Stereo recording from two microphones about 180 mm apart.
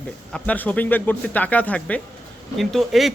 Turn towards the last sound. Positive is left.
turn(degrees=0)  # may be behind; listen again after turning